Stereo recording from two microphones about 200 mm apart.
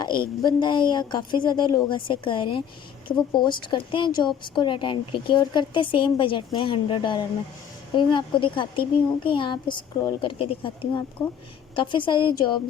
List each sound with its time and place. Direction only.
0.0 s speech: 20° left (ahead or behind)